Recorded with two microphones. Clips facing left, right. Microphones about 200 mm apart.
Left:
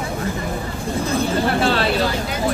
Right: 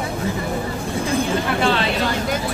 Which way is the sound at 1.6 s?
40° left (ahead or behind).